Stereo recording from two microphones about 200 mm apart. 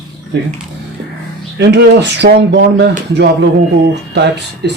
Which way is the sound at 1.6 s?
60° right (ahead or behind).